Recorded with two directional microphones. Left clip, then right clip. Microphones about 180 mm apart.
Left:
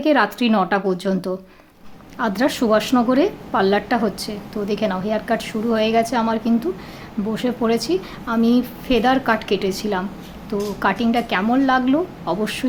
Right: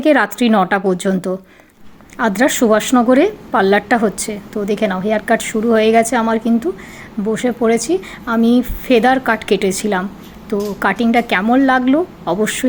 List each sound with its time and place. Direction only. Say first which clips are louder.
0.0 s a woman's voice: right 4 dB; 25° right (ahead or behind)